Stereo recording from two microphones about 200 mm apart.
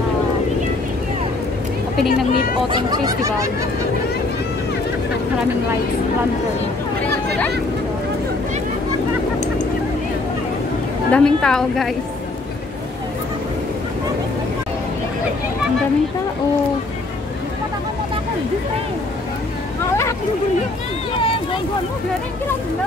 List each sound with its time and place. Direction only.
2.7 s speech: 20° right (ahead or behind)
11.1 s a woman's voice: 5° left (ahead or behind)
19.9 s a sound: 15° left (ahead or behind)